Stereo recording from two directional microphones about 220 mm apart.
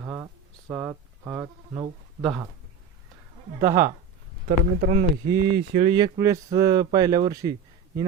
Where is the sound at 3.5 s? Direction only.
15° right (ahead or behind).